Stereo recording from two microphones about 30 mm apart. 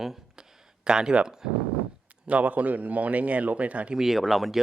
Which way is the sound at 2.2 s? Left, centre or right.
Right.